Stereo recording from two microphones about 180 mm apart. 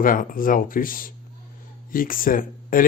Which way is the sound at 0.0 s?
50° left (ahead or behind).